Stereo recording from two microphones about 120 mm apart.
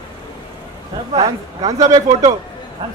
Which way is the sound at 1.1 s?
35° right (ahead or behind).